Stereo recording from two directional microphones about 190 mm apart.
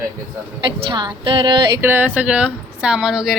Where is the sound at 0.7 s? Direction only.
25° right (ahead or behind).